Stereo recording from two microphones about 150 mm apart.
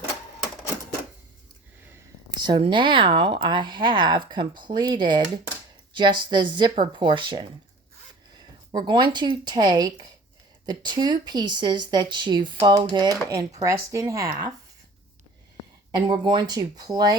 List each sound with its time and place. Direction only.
2.4 s speech: 30° right (ahead or behind)
13.6 s speech: 20° right (ahead or behind)
16.0 s speech: 30° right (ahead or behind)